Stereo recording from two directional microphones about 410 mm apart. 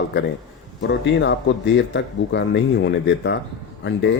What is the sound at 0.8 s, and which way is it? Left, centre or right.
Speech, left.